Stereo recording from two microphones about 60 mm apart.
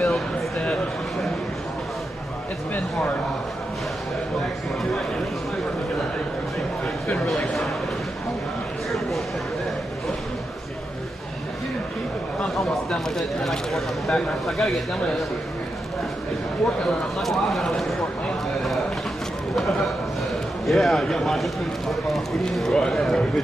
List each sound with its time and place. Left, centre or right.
0.0 s a sound: centre
7.2 s speech: centre
12.5 s speech: centre
17.2 s speech: centre
19.5 s a sound: centre
20.6 s speech: centre